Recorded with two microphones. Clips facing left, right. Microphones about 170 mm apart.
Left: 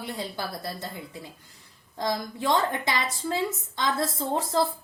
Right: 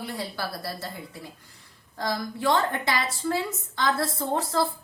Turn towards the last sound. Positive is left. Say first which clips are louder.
# even
turn(degrees=20)  # may be behind; listen again after turning